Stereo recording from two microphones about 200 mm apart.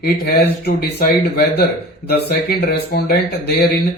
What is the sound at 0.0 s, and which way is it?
Speech, 50° left (ahead or behind).